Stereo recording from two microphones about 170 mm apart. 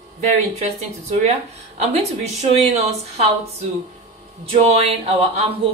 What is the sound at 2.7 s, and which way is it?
Speech, 40° right (ahead or behind).